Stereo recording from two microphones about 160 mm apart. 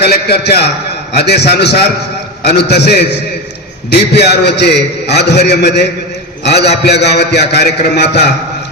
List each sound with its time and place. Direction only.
0.0 s a man's voice: 85° left